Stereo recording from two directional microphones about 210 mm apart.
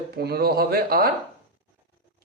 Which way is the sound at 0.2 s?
50° right (ahead or behind).